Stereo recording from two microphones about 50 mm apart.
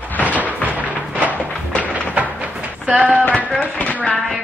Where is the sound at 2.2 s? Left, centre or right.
Right.